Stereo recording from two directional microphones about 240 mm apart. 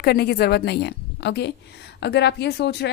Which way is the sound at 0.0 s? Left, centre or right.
Left.